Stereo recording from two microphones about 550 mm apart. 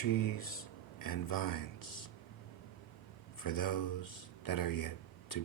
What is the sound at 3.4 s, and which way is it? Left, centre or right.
Speech, left.